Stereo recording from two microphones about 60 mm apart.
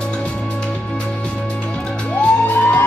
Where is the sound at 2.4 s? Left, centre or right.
Left.